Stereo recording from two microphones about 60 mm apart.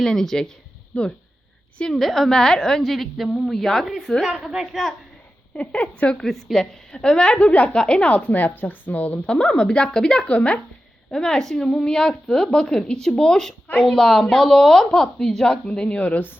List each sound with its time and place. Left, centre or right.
0.0 s a woman's voice: centre
0.9 s speech: left
1.9 s a woman's voice: centre
5.5 s speech: left
6.2 s a woman's voice: centre
8.3 s speech: left
9.1 s a woman's voice: centre
11.1 s a woman's voice: centre; by 16.3 s left